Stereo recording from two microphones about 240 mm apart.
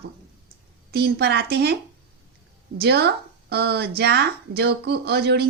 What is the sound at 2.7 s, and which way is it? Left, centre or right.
A woman's voice, right.